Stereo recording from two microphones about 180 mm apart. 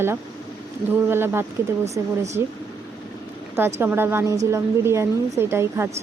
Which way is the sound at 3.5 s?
15° right (ahead or behind).